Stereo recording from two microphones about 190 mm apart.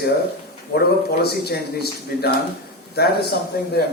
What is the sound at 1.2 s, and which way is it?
A man's voice, 55° left (ahead or behind).